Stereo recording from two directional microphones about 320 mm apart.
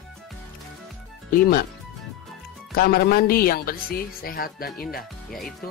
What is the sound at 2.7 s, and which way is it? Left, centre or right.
Speech, left.